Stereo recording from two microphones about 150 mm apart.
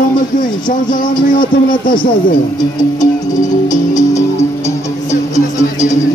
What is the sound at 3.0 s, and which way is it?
Music, 55° left (ahead or behind).